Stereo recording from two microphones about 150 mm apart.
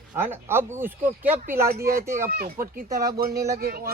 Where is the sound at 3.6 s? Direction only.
90° right.